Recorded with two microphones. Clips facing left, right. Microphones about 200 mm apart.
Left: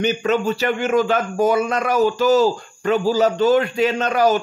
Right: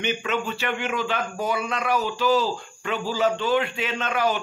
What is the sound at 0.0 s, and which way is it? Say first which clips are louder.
Speech: left 8 dB; 40° left (ahead or behind).